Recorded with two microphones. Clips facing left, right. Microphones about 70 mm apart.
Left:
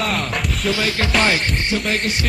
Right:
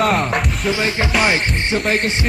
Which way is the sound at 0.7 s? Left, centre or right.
Right.